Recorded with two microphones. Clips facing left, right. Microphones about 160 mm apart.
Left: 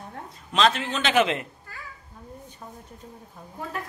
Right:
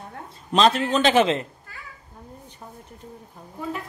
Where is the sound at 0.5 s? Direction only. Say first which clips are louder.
Right 4 dB; 35° right (ahead or behind).